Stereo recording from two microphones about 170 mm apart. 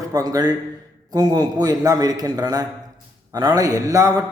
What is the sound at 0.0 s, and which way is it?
A man's voice, 20° right (ahead or behind).